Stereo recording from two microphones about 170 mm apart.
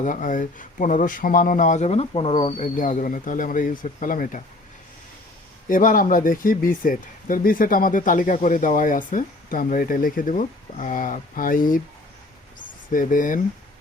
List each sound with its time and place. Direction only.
0.0 s speech: 50° left (ahead or behind)
5.6 s speech: 55° left (ahead or behind)